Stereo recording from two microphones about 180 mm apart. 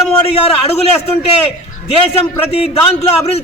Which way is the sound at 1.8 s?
30° left (ahead or behind).